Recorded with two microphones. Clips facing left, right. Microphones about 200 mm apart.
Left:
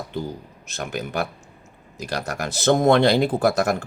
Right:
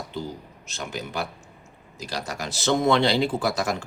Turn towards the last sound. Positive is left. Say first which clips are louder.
# left 5 dB
turn(degrees=55)  # may be behind; listen again after turning